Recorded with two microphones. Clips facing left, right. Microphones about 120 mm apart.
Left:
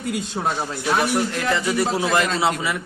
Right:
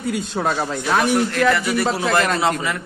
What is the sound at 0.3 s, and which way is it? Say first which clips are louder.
Speech: right 5 dB; 90° right.